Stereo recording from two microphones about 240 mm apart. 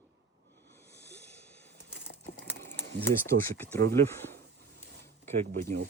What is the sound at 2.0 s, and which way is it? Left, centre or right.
Crumpling, left.